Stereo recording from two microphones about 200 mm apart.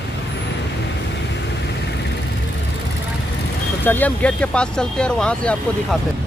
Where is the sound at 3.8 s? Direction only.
10° left (ahead or behind).